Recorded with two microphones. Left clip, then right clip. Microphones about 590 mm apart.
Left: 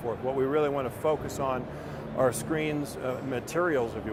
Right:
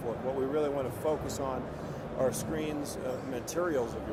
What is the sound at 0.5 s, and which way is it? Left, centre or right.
Speech, left.